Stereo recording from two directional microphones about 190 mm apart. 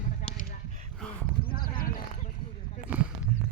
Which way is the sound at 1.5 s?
50° left (ahead or behind).